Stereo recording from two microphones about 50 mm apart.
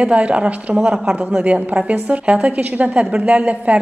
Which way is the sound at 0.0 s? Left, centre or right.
Right.